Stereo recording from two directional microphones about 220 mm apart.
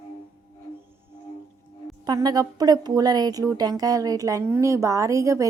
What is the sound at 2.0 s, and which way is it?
A woman's voice, 15° right (ahead or behind).